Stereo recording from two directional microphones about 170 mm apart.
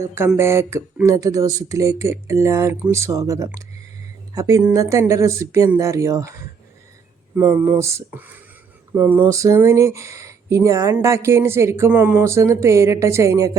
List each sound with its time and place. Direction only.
0.0 s speech: 15° right (ahead or behind)
7.3 s speech: 15° right (ahead or behind)